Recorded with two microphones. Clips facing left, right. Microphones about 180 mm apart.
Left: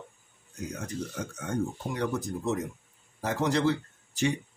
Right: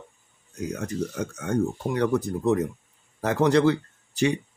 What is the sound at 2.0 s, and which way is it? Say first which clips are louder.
Speech: right 7 dB; 60° right (ahead or behind).